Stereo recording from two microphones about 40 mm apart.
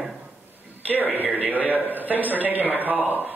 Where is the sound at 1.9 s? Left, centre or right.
Right.